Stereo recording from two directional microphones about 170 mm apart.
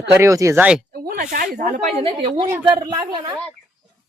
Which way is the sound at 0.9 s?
65° right (ahead or behind).